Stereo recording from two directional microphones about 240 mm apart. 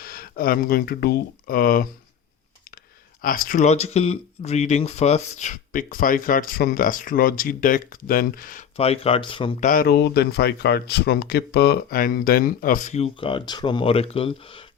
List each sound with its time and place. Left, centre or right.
0.0 s speech: left
3.2 s speech: left
9.6 s speech: left